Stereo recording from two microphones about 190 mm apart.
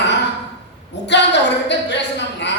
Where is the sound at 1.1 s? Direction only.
65° left (ahead or behind).